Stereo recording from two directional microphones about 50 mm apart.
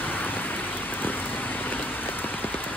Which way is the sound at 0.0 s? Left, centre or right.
Left.